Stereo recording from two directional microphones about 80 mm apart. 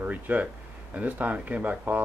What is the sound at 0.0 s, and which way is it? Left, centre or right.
Speech, centre.